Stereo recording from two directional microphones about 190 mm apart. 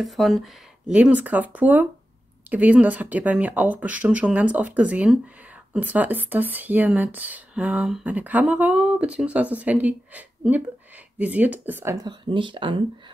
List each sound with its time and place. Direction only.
0.0 s speech: centre (ahead or behind); by 12.8 s 25° right (ahead or behind)